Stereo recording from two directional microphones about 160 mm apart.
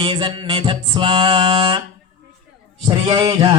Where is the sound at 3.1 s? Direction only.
25° right (ahead or behind).